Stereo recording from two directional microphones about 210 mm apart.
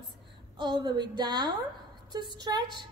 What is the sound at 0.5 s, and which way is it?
A woman's voice, 20° right (ahead or behind).